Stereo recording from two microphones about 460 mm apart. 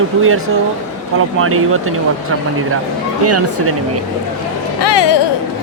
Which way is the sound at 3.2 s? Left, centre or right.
Right.